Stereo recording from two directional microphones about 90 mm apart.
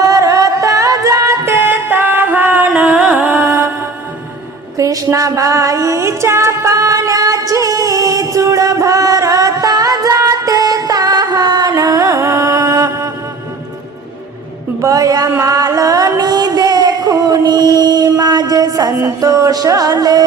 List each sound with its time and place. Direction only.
0.0 s music: 40° right (ahead or behind); by 3.3 s 15° right (ahead or behind)
3.3 s music: 25° right (ahead or behind)
4.8 s music: 40° right (ahead or behind)
14.8 s a sound: 40° right (ahead or behind)
15.3 s music: 40° right (ahead or behind)